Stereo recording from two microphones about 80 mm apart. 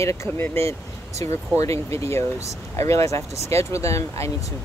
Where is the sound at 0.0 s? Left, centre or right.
Left.